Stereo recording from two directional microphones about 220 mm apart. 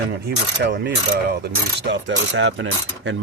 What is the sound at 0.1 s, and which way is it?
Mechanisms, 50° right (ahead or behind).